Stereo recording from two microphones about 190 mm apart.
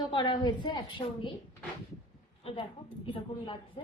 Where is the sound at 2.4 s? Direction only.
30° left (ahead or behind).